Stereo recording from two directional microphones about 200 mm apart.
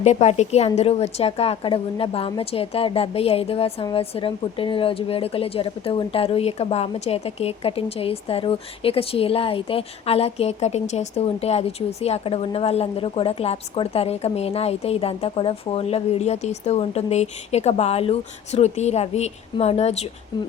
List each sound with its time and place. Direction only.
0.0 s a woman's voice: 35° left (ahead or behind)